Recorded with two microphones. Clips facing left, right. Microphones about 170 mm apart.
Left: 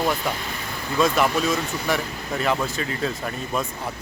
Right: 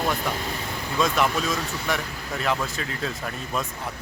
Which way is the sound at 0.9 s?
Centre (ahead or behind).